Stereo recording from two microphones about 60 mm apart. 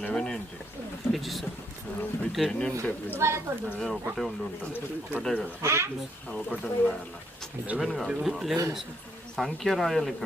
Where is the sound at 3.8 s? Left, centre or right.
Centre.